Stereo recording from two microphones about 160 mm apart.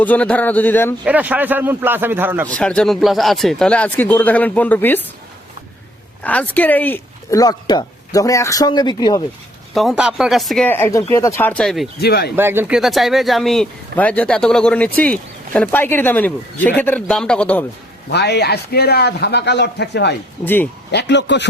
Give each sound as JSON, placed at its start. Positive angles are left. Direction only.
{"t": 0.0, "sound": "speech", "side_deg": 10}
{"t": 1.0, "sound": "a man's voice", "side_deg": -10}
{"t": 2.5, "sound": "speech", "side_deg": 5}
{"t": 6.2, "sound": "speech", "side_deg": 10}
{"t": 9.7, "sound": "speech", "side_deg": 0}
{"t": 10.7, "sound": "speech", "side_deg": 15}
{"t": 11.9, "sound": "speech", "side_deg": 85}
{"t": 12.4, "sound": "speech", "side_deg": -15}
{"t": 18.1, "sound": "a man's voice", "side_deg": 90}
{"t": 20.4, "sound": "speech", "side_deg": 10}
{"t": 20.9, "sound": "a man's voice", "side_deg": 90}